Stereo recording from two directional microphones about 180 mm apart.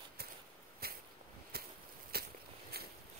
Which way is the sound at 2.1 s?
60° right (ahead or behind).